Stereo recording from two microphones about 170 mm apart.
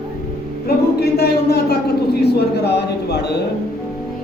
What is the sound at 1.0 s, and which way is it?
A man's voice, 70° left (ahead or behind).